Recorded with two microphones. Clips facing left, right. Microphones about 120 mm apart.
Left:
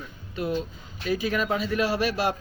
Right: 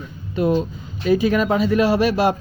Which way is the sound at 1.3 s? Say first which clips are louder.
Right 8 dB; 90° right.